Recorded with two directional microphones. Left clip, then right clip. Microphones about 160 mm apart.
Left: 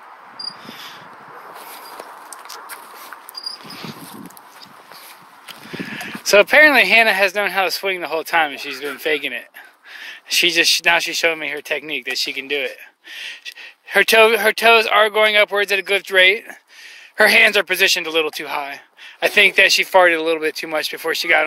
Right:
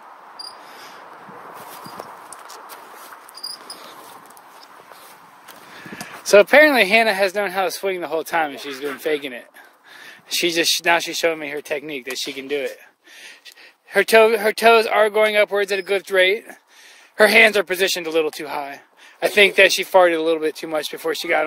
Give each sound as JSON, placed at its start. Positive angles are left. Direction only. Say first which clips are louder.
{"t": 6.0, "sound": "speech", "louder": "even", "side_deg": 0}